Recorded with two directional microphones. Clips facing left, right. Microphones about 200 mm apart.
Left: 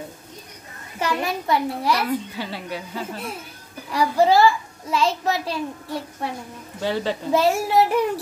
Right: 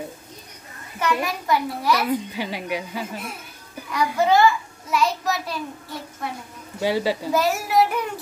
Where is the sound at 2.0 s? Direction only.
15° right (ahead or behind).